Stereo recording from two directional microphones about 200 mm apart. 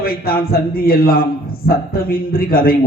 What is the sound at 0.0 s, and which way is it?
A man's voice, 50° left (ahead or behind).